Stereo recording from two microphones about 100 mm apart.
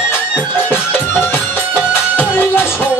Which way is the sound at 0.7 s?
20° left (ahead or behind).